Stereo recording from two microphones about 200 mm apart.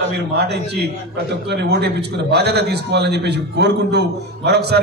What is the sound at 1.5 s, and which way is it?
A man's voice, 55° right (ahead or behind).